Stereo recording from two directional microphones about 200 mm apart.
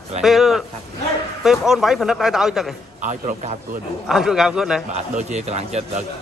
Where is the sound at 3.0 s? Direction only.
40° right (ahead or behind).